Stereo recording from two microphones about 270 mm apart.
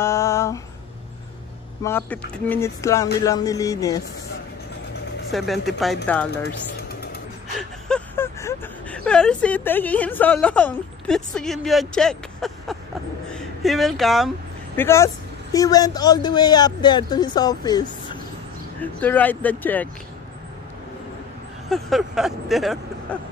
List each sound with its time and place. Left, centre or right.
0.0 s a sound: centre
1.8 s speech: centre
5.3 s speech: centre
6.3 s vehicle: left
7.9 s a woman's voice: centre
21.6 s speech: centre